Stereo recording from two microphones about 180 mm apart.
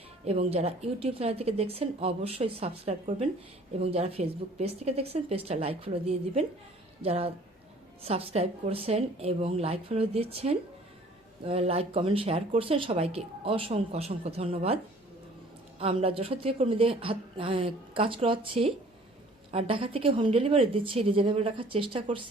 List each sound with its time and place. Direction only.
0.3 s speech: 35° right (ahead or behind)
15.8 s a woman's voice: 30° right (ahead or behind)